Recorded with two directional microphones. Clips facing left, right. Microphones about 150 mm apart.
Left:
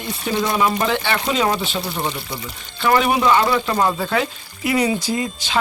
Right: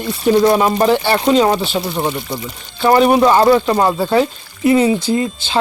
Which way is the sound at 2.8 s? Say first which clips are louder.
Right 6 dB; 35° right (ahead or behind).